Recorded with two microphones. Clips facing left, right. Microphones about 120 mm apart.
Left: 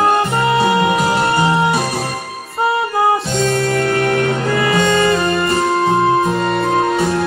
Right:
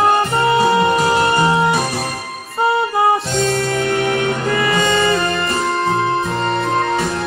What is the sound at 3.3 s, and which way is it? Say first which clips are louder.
Music: left 2 dB; centre (ahead or behind).